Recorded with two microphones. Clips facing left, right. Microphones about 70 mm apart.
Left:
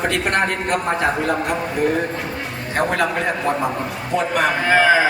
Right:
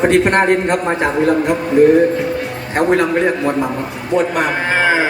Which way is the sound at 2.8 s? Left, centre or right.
Right.